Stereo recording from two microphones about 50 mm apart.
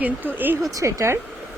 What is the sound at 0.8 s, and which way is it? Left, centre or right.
Speech, right.